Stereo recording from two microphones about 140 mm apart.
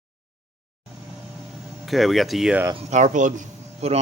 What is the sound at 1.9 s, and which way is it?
Speech, centre (ahead or behind).